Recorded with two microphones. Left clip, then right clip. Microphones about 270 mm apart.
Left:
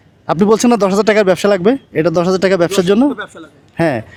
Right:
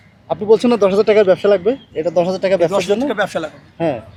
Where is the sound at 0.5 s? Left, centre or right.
Left.